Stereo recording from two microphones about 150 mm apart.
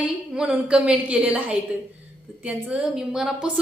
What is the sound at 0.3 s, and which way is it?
A woman's voice, 5° right (ahead or behind).